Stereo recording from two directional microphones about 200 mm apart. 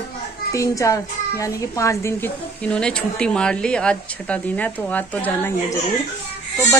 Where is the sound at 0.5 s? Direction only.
15° left (ahead or behind).